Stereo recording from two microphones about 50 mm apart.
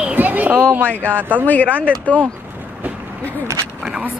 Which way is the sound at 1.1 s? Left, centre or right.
Right.